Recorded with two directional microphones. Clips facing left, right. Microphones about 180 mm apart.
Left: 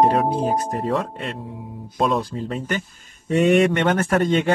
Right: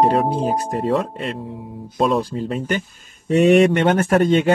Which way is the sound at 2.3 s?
30° right (ahead or behind).